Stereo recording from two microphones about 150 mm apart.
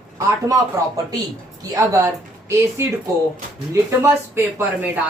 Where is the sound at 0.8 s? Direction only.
20° right (ahead or behind).